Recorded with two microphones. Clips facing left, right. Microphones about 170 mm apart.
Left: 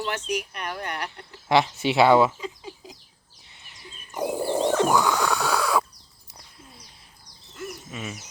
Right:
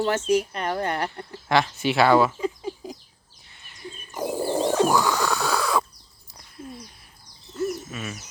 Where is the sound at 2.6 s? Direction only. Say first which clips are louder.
Right 8 dB; 35° right (ahead or behind).